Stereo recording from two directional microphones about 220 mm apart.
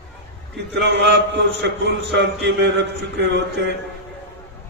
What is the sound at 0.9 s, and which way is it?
A man's voice, 50° right (ahead or behind).